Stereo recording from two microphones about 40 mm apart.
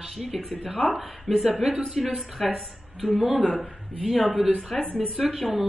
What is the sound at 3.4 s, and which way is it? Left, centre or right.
Speech, left.